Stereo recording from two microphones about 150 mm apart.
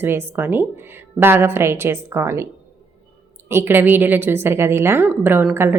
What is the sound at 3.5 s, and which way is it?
A woman's voice, 15° right (ahead or behind).